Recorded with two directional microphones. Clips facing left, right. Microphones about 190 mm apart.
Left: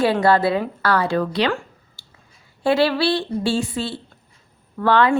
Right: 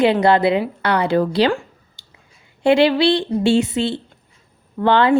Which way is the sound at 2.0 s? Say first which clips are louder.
Even; 20° right (ahead or behind).